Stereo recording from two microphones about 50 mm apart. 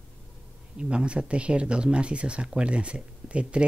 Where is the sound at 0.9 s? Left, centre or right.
Right.